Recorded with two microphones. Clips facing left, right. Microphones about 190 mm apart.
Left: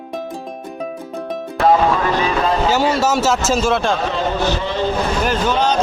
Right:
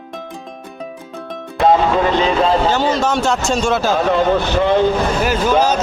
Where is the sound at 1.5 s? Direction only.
25° right (ahead or behind).